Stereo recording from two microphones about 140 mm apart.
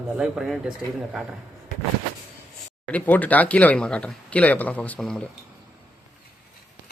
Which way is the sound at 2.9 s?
10° left (ahead or behind).